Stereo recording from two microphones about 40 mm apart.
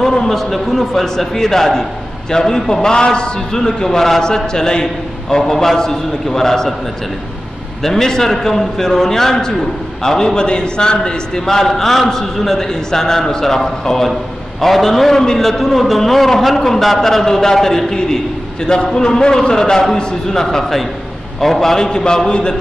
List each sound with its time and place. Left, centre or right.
0.0 s a man's voice: centre
7.8 s a man's voice: centre
20.4 s a man's voice: centre; by 22.6 s left